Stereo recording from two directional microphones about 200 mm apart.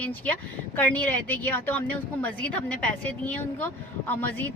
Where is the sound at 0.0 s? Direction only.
10° left (ahead or behind).